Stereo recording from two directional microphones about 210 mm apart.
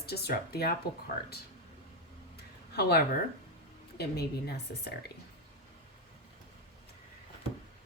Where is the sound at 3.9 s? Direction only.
50° left (ahead or behind).